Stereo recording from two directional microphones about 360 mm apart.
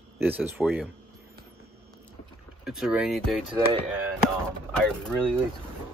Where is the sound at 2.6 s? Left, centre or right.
Centre.